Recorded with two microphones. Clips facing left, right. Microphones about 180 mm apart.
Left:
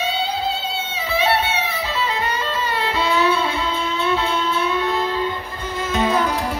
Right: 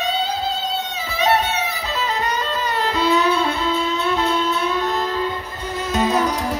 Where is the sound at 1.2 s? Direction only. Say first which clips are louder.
Right 2 dB; 40° right (ahead or behind).